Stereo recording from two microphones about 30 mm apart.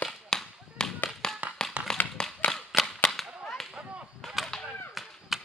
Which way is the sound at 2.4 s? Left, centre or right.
Left.